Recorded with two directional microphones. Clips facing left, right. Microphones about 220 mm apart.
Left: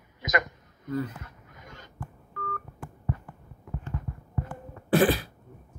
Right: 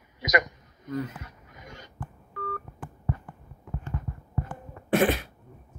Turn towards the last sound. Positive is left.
turn(degrees=35)  # may be behind; listen again after turning